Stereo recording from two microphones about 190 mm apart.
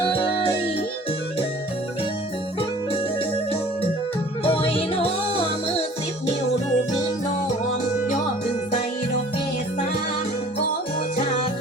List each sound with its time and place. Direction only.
0.0 s music: 25° left (ahead or behind)
4.4 s music: 30° left (ahead or behind)